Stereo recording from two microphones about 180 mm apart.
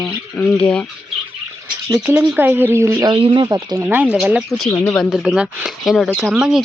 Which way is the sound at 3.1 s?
25° right (ahead or behind).